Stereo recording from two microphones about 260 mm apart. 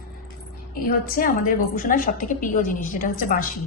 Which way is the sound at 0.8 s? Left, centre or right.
Left.